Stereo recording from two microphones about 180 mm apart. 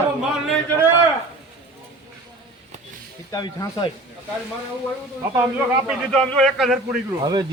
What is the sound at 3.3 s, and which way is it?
Speech, 20° left (ahead or behind).